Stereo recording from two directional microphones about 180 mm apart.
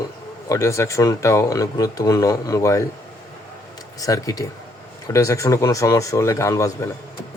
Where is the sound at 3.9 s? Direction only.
20° left (ahead or behind).